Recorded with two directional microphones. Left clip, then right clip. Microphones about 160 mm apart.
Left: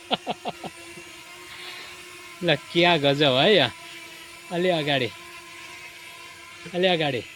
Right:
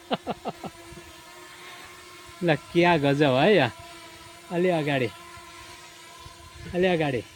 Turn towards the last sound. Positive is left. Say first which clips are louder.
# left 2 dB
turn(degrees=-35)  # may be behind; listen again after turning